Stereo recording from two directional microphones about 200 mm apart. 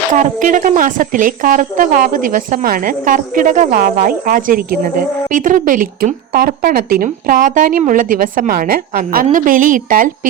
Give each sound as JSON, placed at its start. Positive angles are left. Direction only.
{"t": 0.1, "sound": "a woman's voice", "side_deg": -40}